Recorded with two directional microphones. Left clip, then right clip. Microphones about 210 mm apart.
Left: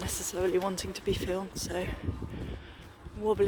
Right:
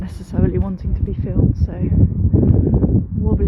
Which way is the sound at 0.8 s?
15° left (ahead or behind).